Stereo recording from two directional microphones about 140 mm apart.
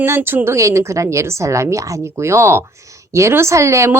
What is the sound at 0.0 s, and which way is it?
Speech, 15° right (ahead or behind).